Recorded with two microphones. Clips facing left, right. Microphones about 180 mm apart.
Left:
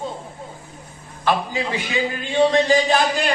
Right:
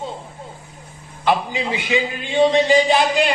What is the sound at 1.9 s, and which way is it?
A man's voice, 20° right (ahead or behind).